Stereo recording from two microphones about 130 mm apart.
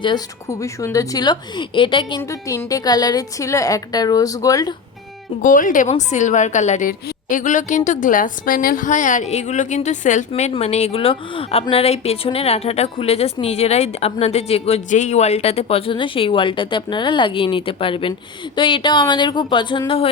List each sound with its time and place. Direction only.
0.0 s a woman's voice: 35° left (ahead or behind)
0.6 s a woman's voice: 25° left (ahead or behind)
2.3 s a woman's voice: 25° left (ahead or behind)
5.4 s speech: 90° left
5.9 s a woman's voice: 65° left (ahead or behind)
10.5 s a woman's voice: 55° left (ahead or behind)